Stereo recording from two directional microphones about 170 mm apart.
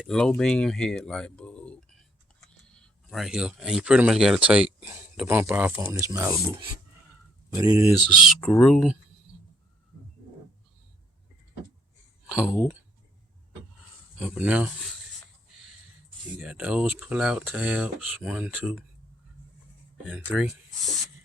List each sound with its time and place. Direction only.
0.0 s speech: 5° left (ahead or behind); by 6.4 s 20° right (ahead or behind)
7.5 s speech: 20° right (ahead or behind)
8.2 s speech: centre (ahead or behind)
12.3 s speech: 5° right (ahead or behind)
14.2 s speech: 5° right (ahead or behind)
16.4 s speech: 5° right (ahead or behind)
20.1 s speech: 5° right (ahead or behind)